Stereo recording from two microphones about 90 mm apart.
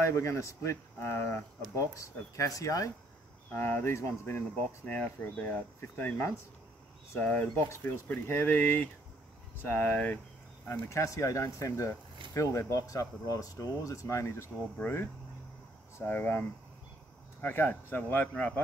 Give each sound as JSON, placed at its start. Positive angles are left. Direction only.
{"t": 0.1, "sound": "speech", "side_deg": 35}
{"t": 3.5, "sound": "speech", "side_deg": 25}
{"t": 10.7, "sound": "speech", "side_deg": 35}